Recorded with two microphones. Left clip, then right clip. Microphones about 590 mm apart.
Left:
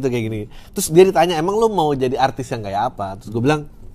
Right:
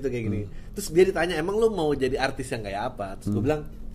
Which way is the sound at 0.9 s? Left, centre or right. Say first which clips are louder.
Left 9 dB; left.